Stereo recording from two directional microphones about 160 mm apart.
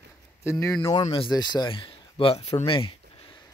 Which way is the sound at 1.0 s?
35° left (ahead or behind).